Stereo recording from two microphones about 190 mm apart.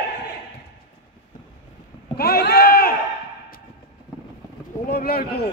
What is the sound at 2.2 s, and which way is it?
Rowboat, 55° left (ahead or behind).